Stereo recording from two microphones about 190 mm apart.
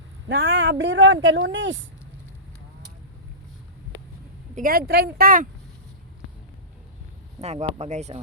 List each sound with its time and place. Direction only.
0.3 s speech: 60° right (ahead or behind)
4.5 s speech: 50° right (ahead or behind)
7.4 s speech: 35° right (ahead or behind)